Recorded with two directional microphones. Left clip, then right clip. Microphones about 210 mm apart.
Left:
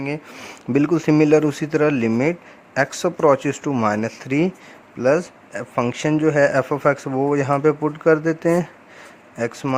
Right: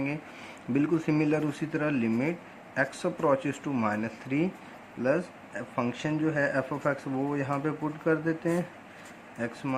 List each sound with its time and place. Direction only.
0.0 s speech: 45° left (ahead or behind)